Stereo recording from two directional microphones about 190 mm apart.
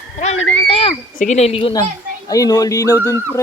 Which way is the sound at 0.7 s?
30° left (ahead or behind).